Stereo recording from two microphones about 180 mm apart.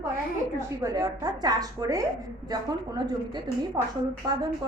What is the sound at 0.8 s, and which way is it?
A woman's voice, 20° right (ahead or behind).